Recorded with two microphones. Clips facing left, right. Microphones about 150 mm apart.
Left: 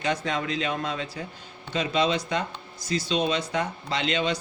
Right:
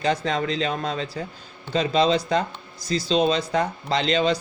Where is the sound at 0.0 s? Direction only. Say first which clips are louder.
Right 4 dB; 35° right (ahead or behind).